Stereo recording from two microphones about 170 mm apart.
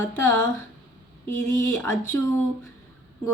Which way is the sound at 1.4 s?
15° left (ahead or behind).